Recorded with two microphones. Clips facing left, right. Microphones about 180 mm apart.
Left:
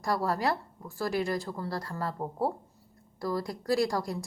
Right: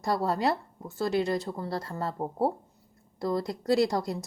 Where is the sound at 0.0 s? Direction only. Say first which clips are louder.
Right 2 dB; 25° right (ahead or behind).